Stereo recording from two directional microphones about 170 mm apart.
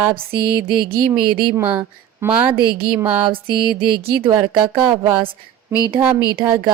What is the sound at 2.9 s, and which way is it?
Speech, 10° right (ahead or behind).